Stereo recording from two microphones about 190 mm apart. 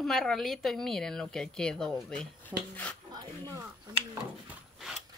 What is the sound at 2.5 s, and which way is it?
Speech, 10° right (ahead or behind).